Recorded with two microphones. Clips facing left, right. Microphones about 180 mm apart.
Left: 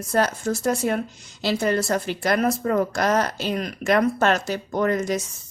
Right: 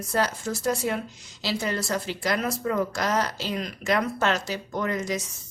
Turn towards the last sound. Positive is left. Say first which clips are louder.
# left 6 dB
turn(degrees=50)  # may be behind; listen again after turning